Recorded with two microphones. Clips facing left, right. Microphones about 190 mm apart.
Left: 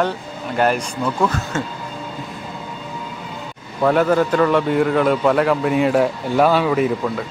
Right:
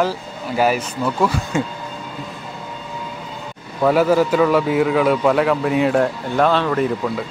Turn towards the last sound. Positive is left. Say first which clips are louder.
# left 1 dB
turn(degrees=0)  # may be behind; listen again after turning